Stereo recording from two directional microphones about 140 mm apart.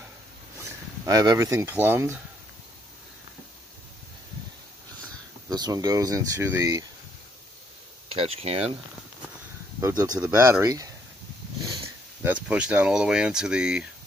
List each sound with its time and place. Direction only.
0.6 s speech: 25° right (ahead or behind)
5.0 s speech: 30° right (ahead or behind)
8.1 s speech: 45° right (ahead or behind)
9.8 s speech: 25° right (ahead or behind)
11.6 s dog: 25° right (ahead or behind)
12.2 s speech: 10° right (ahead or behind)